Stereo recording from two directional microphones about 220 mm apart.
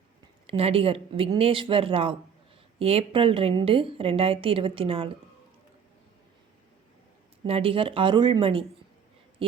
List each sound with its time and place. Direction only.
0.4 s a woman's voice: 25° right (ahead or behind)
7.4 s a woman's voice: 25° right (ahead or behind)